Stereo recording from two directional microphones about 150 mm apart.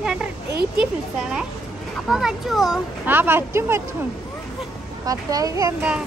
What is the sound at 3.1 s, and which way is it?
Speech, 15° right (ahead or behind).